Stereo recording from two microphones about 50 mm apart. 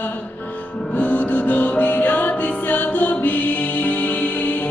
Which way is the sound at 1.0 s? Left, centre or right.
Left.